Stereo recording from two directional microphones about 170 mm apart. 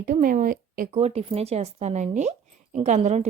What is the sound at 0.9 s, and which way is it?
Speech, 35° right (ahead or behind).